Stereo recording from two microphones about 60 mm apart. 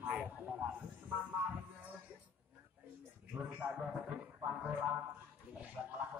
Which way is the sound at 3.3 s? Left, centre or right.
Right.